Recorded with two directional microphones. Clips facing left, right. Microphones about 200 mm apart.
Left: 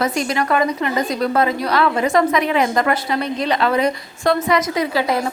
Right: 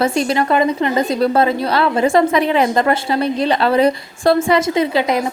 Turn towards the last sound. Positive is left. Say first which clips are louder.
# right 3 dB
turn(degrees=-20)  # may be behind; listen again after turning